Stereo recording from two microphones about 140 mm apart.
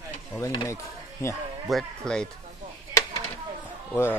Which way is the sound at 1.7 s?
5° left (ahead or behind).